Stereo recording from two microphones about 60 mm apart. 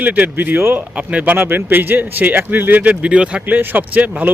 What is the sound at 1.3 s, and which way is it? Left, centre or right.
Speech, right.